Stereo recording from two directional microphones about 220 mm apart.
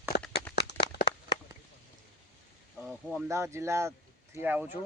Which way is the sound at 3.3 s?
15° right (ahead or behind).